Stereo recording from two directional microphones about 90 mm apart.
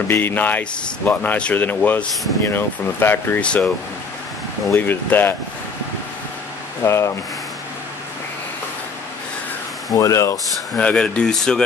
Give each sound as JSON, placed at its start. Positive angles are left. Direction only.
{"t": 0.1, "sound": "speech", "side_deg": 20}
{"t": 3.3, "sound": "speech", "side_deg": 10}
{"t": 4.7, "sound": "speech", "side_deg": 20}
{"t": 6.8, "sound": "speech", "side_deg": 30}
{"t": 9.8, "sound": "speech", "side_deg": 40}
{"t": 10.8, "sound": "speech", "side_deg": 10}